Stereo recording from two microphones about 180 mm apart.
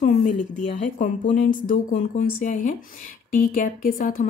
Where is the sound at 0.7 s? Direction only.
45° left (ahead or behind).